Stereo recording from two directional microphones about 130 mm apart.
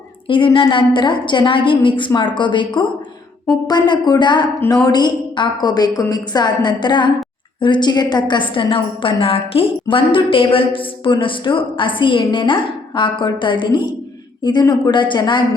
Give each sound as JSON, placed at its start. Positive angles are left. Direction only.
{"t": 0.3, "sound": "a woman's voice", "side_deg": 40}